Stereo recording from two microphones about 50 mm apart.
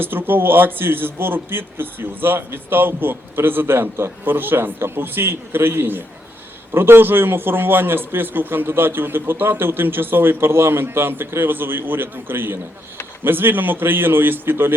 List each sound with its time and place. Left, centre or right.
0.0 s a man's voice: right
4.3 s a man's voice: right